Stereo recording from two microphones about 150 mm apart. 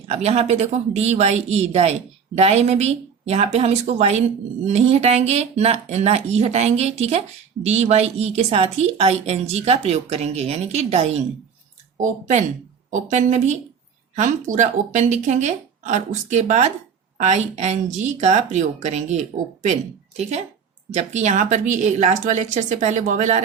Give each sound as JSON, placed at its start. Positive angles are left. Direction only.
{"t": 0.0, "sound": "speech", "side_deg": -45}
{"t": 11.9, "sound": "speech", "side_deg": -55}
{"t": 20.9, "sound": "speech", "side_deg": -50}